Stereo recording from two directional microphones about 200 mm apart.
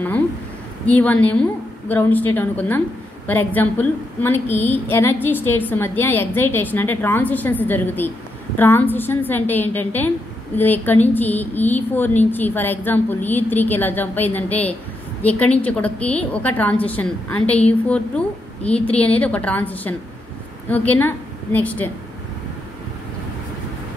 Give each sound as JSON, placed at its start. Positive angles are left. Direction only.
{"t": 0.8, "sound": "a woman's voice", "side_deg": 10}